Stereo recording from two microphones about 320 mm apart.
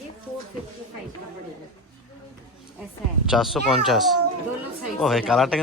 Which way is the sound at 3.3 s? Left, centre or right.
Centre.